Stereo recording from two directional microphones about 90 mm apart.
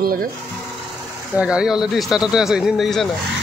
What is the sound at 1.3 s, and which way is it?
Speech, 10° right (ahead or behind).